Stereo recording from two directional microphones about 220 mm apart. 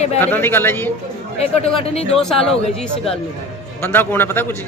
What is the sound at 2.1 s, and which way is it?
A man's voice, centre (ahead or behind).